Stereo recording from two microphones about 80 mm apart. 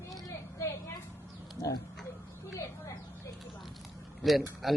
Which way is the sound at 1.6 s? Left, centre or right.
Left.